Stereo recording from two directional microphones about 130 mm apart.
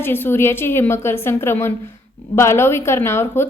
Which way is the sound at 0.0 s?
15° left (ahead or behind).